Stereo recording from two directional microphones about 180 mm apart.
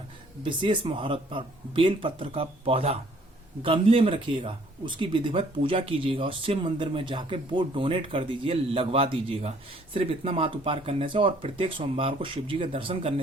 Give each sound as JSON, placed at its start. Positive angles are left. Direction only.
{"t": 0.4, "sound": "speech", "side_deg": -25}